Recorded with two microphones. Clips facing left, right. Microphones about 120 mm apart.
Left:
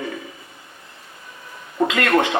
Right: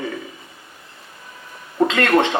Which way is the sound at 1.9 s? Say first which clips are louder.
Right 1 dB; 30° right (ahead or behind).